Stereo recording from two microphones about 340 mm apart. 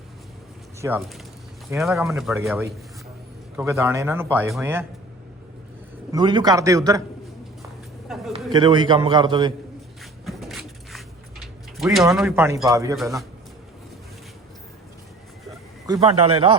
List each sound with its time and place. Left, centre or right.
0.8 s a man's voice: centre
6.1 s a man's voice: centre
8.0 s a sound: centre
8.5 s a man's voice: centre
10.0 s cupboard open or close: centre
11.8 s a man's voice: centre
15.9 s a man's voice: centre